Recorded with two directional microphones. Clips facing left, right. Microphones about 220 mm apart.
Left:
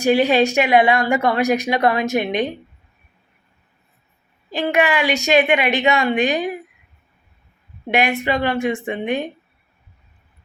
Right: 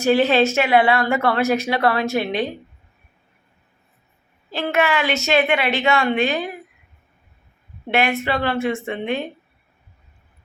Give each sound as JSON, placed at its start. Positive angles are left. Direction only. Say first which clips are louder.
{"t": 0.0, "sound": "a woman's voice", "louder": "left 1 dB", "side_deg": 15}
{"t": 4.4, "sound": "a woman's voice", "louder": "left 2 dB", "side_deg": 15}
{"t": 7.9, "sound": "a woman's voice", "louder": "left 1 dB", "side_deg": 15}